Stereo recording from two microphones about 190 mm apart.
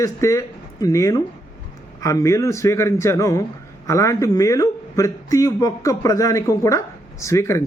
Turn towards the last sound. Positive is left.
turn(degrees=15)  # may be behind; listen again after turning